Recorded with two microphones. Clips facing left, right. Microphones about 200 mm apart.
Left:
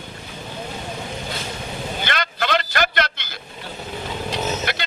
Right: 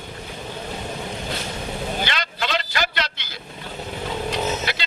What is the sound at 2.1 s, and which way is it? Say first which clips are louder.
Vehicle: left 4 dB; 55° left (ahead or behind).